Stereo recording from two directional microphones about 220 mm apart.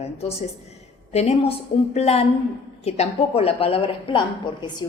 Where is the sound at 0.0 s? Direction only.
30° left (ahead or behind).